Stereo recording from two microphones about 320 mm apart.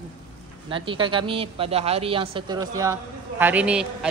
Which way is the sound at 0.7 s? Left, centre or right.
Centre.